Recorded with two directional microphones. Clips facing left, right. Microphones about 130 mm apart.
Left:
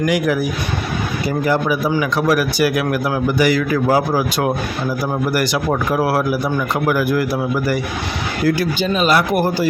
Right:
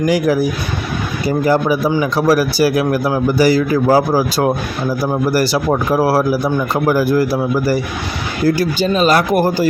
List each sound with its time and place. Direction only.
0.0 s a man's voice: 35° right (ahead or behind)
1.5 s a man's voice: 35° right (ahead or behind)